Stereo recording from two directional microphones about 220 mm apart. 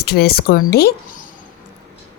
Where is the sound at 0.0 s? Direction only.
45° left (ahead or behind).